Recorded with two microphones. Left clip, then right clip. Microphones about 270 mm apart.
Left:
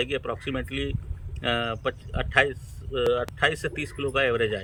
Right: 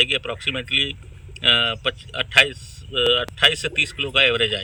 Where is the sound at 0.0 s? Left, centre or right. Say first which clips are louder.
Right 8 dB; centre.